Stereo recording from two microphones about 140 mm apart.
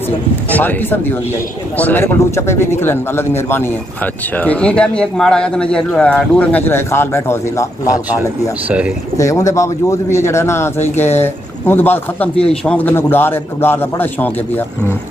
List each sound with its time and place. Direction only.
0.5 s speech: 10° left (ahead or behind)
8.2 s speech: 10° right (ahead or behind)
9.1 s a man's voice: 25° left (ahead or behind)